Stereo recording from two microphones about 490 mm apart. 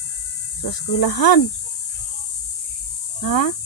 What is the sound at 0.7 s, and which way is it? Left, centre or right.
Speech, left.